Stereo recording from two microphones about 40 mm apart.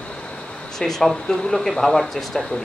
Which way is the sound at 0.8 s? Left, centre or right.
Centre.